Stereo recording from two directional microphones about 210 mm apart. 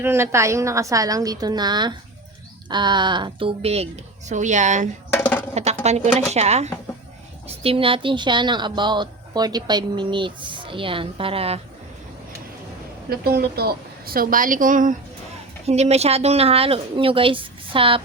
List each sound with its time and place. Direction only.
0.0 s a woman's voice: 10° right (ahead or behind); by 4.9 s 35° right (ahead or behind)
5.1 s music: 10° left (ahead or behind)
5.8 s a woman's voice: 30° right (ahead or behind)
13.1 s a woman's voice: 50° right (ahead or behind); by 18.0 s 25° right (ahead or behind)